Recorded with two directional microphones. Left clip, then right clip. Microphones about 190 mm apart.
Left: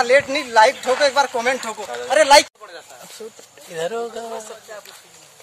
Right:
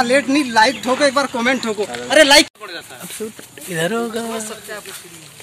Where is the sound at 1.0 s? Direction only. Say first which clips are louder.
Right 1 dB; 65° left (ahead or behind).